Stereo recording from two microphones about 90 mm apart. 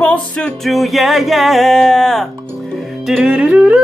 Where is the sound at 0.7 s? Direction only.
Centre (ahead or behind).